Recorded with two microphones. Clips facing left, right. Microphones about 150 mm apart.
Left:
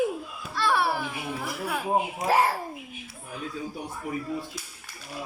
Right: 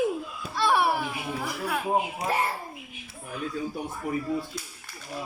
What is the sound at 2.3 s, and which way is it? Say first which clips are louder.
Speech: left 7 dB; 90° left.